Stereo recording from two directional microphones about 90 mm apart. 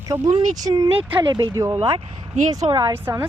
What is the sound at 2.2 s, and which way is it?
Speech, 50° right (ahead or behind).